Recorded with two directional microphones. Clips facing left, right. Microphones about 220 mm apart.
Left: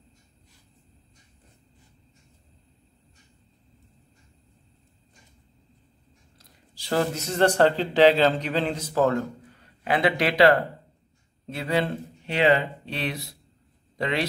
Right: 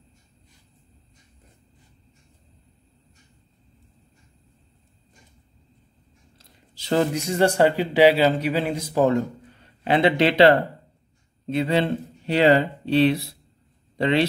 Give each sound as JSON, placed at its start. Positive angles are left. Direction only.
{"t": 6.3, "sound": "speech", "side_deg": -20}